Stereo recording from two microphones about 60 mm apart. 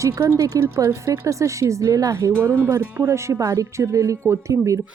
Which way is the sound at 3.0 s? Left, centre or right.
Right.